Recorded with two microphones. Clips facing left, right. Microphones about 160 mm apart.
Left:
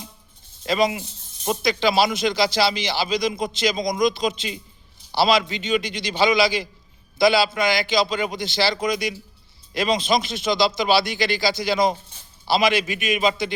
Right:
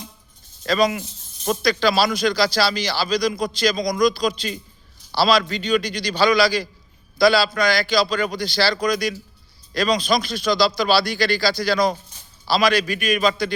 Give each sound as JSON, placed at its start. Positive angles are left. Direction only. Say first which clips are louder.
{"t": 0.6, "sound": "speech", "louder": "right 2 dB", "side_deg": 20}